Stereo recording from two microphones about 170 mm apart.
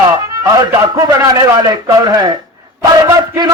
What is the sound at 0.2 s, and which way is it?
A man's voice, 20° right (ahead or behind).